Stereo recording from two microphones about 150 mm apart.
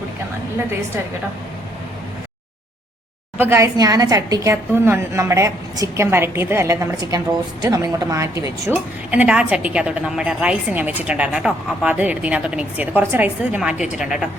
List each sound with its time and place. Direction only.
3.3 s a woman's voice: 15° right (ahead or behind)
8.7 s speech: 10° right (ahead or behind)